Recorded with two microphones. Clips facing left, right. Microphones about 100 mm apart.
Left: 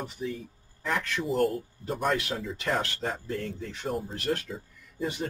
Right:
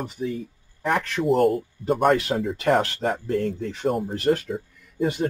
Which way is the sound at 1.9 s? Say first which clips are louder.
Right 9 dB; 60° right (ahead or behind).